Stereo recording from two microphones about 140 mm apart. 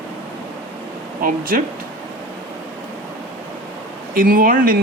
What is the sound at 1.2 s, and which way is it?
Speech, 80° right.